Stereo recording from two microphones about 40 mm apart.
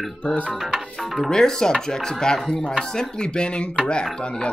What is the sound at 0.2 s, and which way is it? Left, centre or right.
Speech, left.